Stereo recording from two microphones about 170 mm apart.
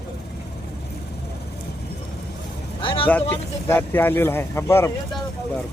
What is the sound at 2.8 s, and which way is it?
Speech, 30° left (ahead or behind).